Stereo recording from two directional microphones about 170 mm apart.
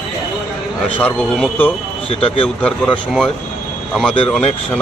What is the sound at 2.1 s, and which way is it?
Speech, 35° left (ahead or behind).